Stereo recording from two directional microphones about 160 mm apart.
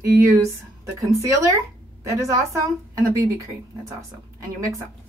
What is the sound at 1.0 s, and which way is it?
Speech, 20° right (ahead or behind).